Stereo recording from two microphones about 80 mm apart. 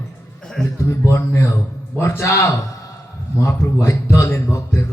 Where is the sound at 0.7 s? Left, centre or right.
Left.